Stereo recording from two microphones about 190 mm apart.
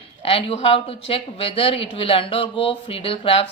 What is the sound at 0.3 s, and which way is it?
A woman's voice, 30° left (ahead or behind).